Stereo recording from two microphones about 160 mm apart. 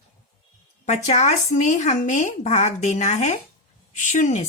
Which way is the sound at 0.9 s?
45° left (ahead or behind).